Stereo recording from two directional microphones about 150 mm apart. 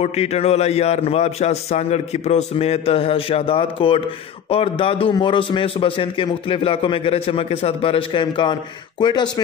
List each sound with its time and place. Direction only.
0.0 s a man's voice: 45° left (ahead or behind); by 9.3 s 30° left (ahead or behind)